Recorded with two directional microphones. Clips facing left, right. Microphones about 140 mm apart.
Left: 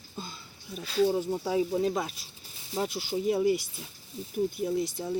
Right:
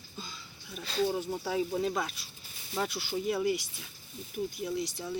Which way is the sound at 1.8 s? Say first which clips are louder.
Left 3 dB; 35° left (ahead or behind).